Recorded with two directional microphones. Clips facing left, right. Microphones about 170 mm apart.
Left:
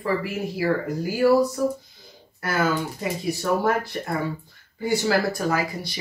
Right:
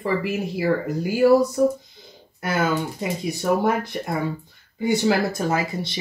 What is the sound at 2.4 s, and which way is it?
Speech, 20° right (ahead or behind).